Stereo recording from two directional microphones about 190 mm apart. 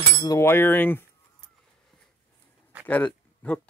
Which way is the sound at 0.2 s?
15° left (ahead or behind).